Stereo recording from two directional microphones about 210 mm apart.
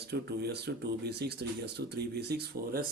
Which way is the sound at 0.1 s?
50° right (ahead or behind).